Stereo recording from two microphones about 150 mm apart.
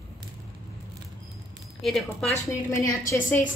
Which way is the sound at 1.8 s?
Centre (ahead or behind).